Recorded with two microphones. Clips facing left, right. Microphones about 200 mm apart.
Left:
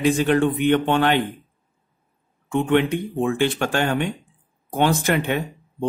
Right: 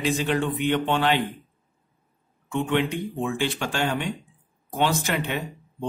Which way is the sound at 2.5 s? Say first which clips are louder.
Left 5 dB; 55° left (ahead or behind).